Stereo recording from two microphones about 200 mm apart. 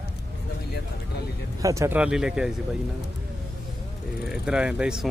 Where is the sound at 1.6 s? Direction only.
15° right (ahead or behind).